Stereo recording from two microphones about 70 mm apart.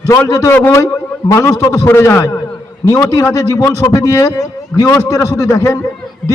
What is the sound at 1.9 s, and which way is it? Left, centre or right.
Speech, left.